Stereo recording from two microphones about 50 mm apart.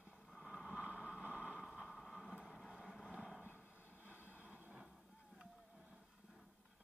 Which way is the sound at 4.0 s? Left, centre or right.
Left.